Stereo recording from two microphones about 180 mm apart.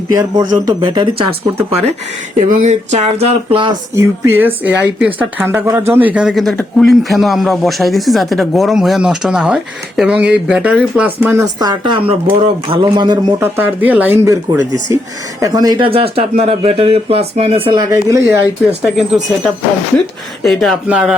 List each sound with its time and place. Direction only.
0.1 s speech: 20° right (ahead or behind)
3.9 s speech: 15° right (ahead or behind)
13.4 s speech: 10° right (ahead or behind)
18.8 s speech: centre (ahead or behind)